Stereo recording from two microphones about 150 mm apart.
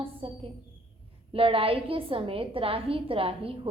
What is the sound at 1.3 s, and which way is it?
A woman's voice, 40° right (ahead or behind).